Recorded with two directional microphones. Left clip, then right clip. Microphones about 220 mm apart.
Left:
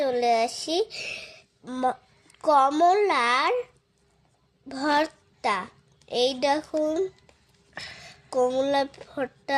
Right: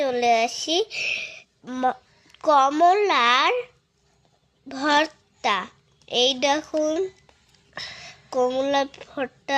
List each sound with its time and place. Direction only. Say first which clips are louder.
0.0 s speech: right 2 dB; 5° right (ahead or behind)
4.7 s a woman's voice: right 3 dB; 5° right (ahead or behind)
7.8 s speech: right 4 dB; 20° right (ahead or behind)
8.0 s speech: right 1 dB; centre (ahead or behind)